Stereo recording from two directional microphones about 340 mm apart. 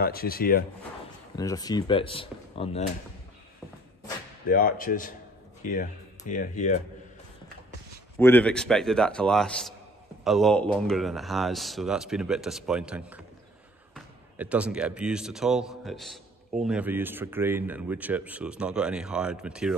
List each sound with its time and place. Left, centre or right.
0.0 s speech: left
1.3 s speech: centre
4.5 s speech: left
8.2 s speech: centre